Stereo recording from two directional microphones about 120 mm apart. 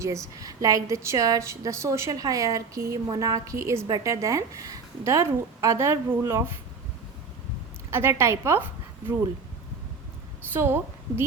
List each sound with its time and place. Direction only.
0.0 s a woman's voice: 25° right (ahead or behind)
7.9 s a woman's voice: 20° right (ahead or behind)
10.5 s a woman's voice: 20° right (ahead or behind)